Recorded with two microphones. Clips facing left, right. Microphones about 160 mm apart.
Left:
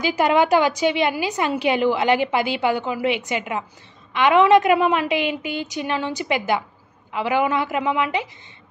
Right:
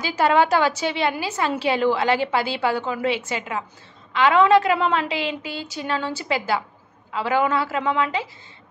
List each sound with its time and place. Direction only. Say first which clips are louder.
0.0 s a woman's voice: left 1 dB; 15° left (ahead or behind)